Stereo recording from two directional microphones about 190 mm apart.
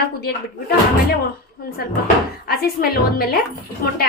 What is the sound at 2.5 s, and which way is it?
Speech, 55° left (ahead or behind).